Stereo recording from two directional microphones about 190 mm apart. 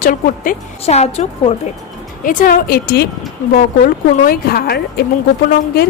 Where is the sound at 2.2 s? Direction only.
45° left (ahead or behind).